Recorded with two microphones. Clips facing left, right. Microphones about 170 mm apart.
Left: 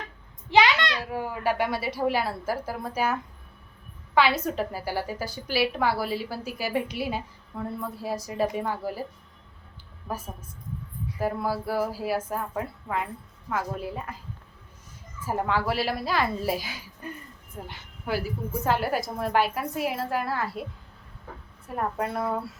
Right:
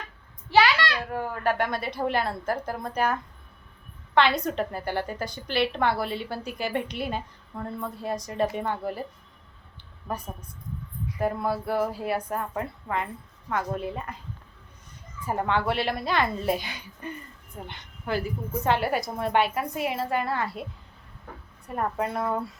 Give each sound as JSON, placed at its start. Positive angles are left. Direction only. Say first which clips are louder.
{"t": 0.5, "sound": "a sound", "louder": "even", "side_deg": 20}
{"t": 1.1, "sound": "a woman's voice", "louder": "even", "side_deg": 10}
{"t": 10.1, "sound": "a woman's voice", "louder": "right 1 dB", "side_deg": 5}
{"t": 15.2, "sound": "a woman's voice", "louder": "right 1 dB", "side_deg": 5}
{"t": 21.7, "sound": "a woman's voice", "louder": "right 1 dB", "side_deg": 0}